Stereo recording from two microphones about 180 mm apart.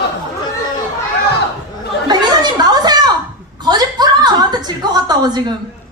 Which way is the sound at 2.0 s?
25° right (ahead or behind).